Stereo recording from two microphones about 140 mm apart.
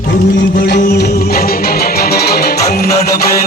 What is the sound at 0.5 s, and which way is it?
Music, 90° left.